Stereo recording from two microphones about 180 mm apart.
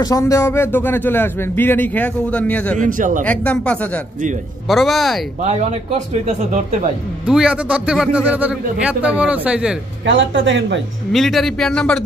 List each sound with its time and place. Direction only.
0.0 s speech: 15° left (ahead or behind)
2.8 s a man's voice: 45° right (ahead or behind)
3.3 s a man's voice: 5° left (ahead or behind)
5.4 s speech: 40° right (ahead or behind)
7.2 s a man's voice: 5° right (ahead or behind)
10.0 s speech: 90° right
11.1 s a man's voice: centre (ahead or behind)